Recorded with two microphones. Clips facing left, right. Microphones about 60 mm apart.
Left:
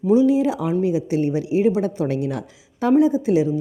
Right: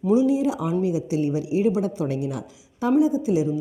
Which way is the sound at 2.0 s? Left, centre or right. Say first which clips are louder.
Left 3 dB; left.